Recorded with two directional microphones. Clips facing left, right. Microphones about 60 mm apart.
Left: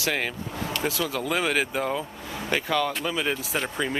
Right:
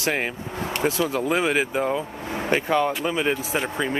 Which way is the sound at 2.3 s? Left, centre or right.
Right.